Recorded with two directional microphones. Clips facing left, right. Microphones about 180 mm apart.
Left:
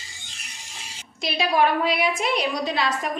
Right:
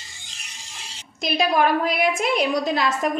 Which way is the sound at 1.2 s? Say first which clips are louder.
Right 1 dB; 50° right (ahead or behind).